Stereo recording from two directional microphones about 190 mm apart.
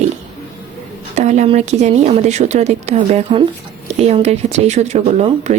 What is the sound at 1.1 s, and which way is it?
Speech, 35° right (ahead or behind).